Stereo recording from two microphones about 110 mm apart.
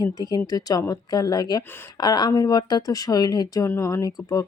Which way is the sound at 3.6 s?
25° left (ahead or behind).